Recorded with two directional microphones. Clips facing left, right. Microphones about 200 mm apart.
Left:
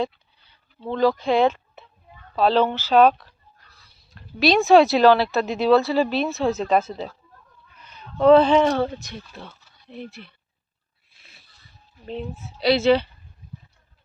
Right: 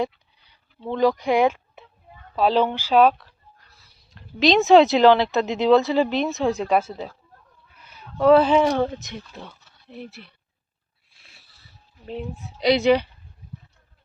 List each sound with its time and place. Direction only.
0.0 s a sound: 15° right (ahead or behind)
0.9 s speech: 15° right (ahead or behind)
4.1 s speech: 20° right (ahead or behind)
9.9 s speech: 5° right (ahead or behind)
11.1 s a sound: centre (ahead or behind)
12.0 s speech: 10° right (ahead or behind)